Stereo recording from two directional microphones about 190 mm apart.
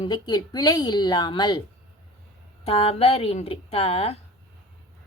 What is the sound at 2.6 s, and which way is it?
Speech, 30° left (ahead or behind).